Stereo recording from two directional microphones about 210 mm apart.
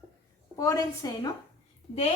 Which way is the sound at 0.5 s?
15° left (ahead or behind).